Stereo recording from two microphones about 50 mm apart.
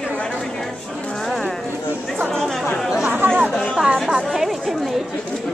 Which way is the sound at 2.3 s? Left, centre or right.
Centre.